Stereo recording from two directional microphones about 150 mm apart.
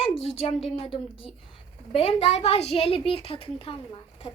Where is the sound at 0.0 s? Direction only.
40° left (ahead or behind).